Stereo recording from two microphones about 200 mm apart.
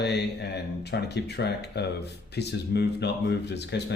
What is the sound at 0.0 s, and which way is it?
Speech, 55° left (ahead or behind).